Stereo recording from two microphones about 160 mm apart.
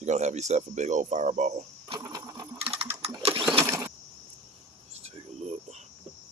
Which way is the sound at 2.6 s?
35° right (ahead or behind).